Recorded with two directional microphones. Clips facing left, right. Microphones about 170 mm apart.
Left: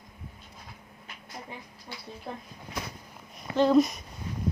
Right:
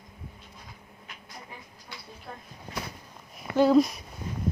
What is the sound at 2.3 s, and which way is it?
Speech, 20° left (ahead or behind).